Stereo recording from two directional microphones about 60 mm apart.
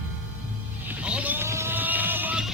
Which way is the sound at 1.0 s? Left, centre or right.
Right.